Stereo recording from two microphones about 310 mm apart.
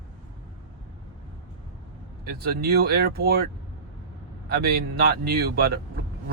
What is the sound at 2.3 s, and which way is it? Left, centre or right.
Speech, right.